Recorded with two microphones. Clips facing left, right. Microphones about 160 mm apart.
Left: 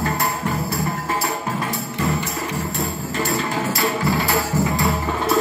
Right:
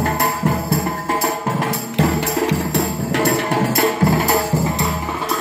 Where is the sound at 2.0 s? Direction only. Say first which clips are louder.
Right 7 dB; 90° right.